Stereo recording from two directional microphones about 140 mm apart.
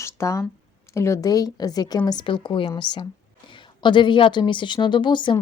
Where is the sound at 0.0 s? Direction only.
20° left (ahead or behind).